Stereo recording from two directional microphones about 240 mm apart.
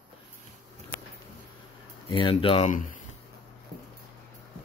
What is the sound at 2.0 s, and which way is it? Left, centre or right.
Speech, left.